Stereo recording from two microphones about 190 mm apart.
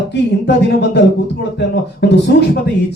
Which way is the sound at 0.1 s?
65° left (ahead or behind).